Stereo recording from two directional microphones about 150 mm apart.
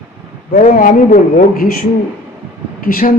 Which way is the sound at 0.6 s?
60° left (ahead or behind).